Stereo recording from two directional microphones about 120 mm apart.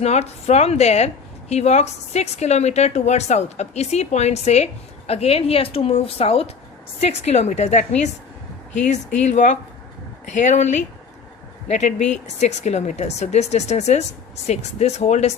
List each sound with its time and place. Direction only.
0.0 s a woman's voice: 65° left (ahead or behind)
7.0 s speech: 65° left (ahead or behind)
8.7 s speech: 85° left; by 15.4 s 70° left (ahead or behind)